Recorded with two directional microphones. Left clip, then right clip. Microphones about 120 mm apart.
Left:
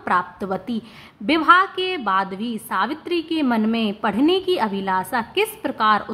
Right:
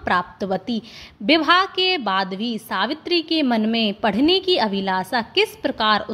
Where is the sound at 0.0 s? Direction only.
30° right (ahead or behind).